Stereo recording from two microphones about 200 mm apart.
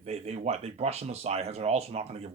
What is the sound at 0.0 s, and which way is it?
Speech, 30° right (ahead or behind).